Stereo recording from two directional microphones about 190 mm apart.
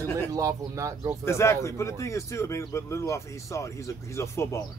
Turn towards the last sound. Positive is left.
turn(degrees=15)  # may be behind; listen again after turning